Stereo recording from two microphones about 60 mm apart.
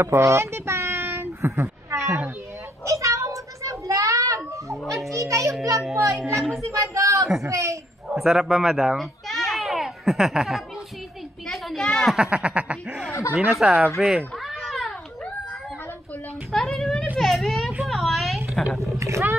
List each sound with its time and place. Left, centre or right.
0.0 s a child's voice: right
1.0 s a sound: right
1.9 s cat: right
5.1 s a child's voice: right
6.3 s a woman's voice: centre
6.6 s a child's voice: right
8.1 s a child's voice: centre
11.5 s a sound: centre
12.1 s snicker: centre
13.5 s a woman's voice: centre
13.9 s snicker: centre
14.6 s cat: centre
16.5 s a sound: centre
18.9 s a sound: right